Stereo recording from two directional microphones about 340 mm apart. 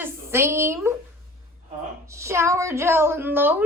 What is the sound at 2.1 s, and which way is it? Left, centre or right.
Speech, centre.